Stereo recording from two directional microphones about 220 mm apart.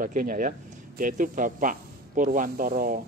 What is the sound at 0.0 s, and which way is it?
Speech, 40° right (ahead or behind).